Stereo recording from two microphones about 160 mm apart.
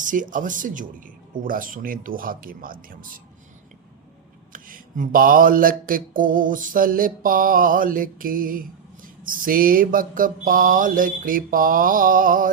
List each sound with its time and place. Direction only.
0.0 s mantra: 55° right (ahead or behind)
4.5 s mantra: 60° right (ahead or behind)